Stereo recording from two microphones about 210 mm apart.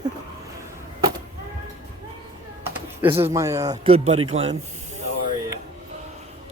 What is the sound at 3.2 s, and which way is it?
Speech, 15° right (ahead or behind).